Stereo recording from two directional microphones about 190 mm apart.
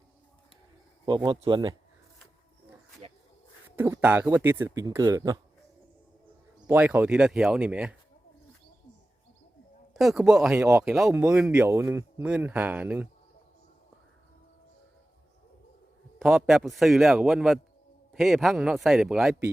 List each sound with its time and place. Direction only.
1.0 s speech: 25° right (ahead or behind)
3.0 s a sound: 30° right (ahead or behind)
3.8 s speech: 10° right (ahead or behind)
6.7 s speech: 10° right (ahead or behind)
9.9 s speech: centre (ahead or behind)
16.1 s speech: centre (ahead or behind)